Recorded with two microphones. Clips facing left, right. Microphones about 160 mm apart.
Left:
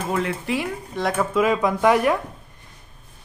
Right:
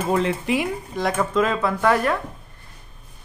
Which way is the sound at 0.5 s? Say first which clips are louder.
Right 3 dB; 20° right (ahead or behind).